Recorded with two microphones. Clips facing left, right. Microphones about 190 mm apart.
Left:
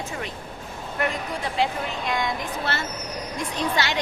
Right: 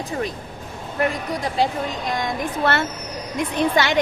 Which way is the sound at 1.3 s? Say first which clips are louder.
Right 4 dB; 35° right (ahead or behind).